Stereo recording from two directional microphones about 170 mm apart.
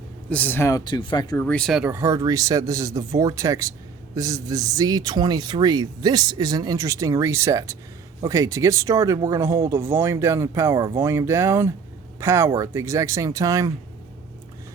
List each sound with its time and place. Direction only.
0.3 s speech: 10° left (ahead or behind)
0.9 s speech: 25° left (ahead or behind)
1.4 s speech: 5° left (ahead or behind)
1.8 s speech: 15° right (ahead or behind)